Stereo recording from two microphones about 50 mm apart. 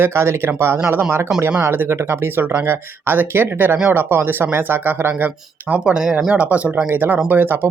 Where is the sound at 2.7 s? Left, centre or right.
Right; by 6.3 s centre.